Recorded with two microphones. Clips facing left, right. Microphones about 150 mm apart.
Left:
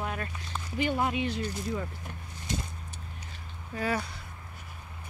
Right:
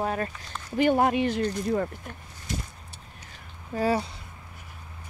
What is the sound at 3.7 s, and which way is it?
Speech, 35° right (ahead or behind).